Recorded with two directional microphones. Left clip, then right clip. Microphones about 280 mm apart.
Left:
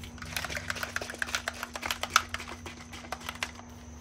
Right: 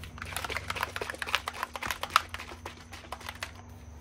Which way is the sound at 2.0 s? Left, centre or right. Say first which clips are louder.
Even; centre.